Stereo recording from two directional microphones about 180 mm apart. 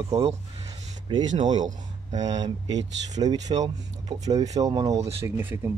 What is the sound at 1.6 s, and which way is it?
Speech, 40° right (ahead or behind).